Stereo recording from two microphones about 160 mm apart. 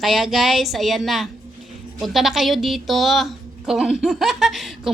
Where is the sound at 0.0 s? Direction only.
Centre (ahead or behind).